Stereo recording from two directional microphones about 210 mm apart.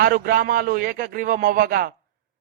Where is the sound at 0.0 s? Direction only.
45° right (ahead or behind).